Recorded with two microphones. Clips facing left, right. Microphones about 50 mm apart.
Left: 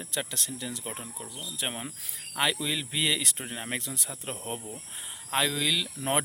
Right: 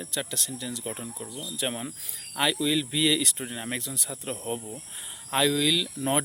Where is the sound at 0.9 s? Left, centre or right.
Centre.